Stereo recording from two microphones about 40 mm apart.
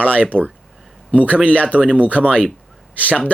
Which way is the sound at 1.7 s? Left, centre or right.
Right.